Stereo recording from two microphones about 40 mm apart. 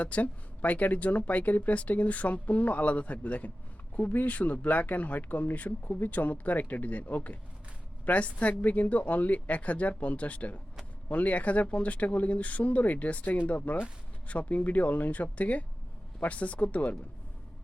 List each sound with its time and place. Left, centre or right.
0.0 s speech: left